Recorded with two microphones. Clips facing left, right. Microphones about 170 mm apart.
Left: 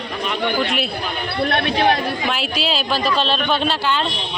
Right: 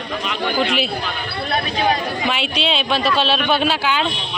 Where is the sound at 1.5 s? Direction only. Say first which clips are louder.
Left 1 dB; 65° left (ahead or behind).